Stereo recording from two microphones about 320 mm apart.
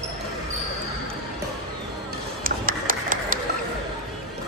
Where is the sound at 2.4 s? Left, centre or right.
Right.